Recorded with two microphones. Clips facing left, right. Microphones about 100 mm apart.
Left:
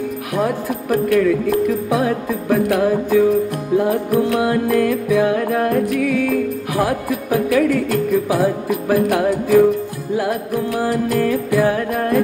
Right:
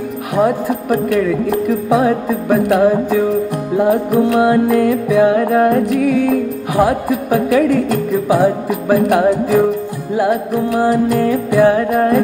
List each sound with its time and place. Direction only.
0.4 s speech: 20° right (ahead or behind)